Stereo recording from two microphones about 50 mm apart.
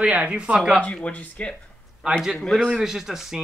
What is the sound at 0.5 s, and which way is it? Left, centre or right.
Speech, centre.